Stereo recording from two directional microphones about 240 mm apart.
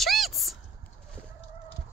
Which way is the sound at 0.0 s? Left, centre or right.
Centre.